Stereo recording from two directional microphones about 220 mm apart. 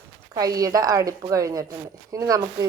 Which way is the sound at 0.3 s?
15° right (ahead or behind).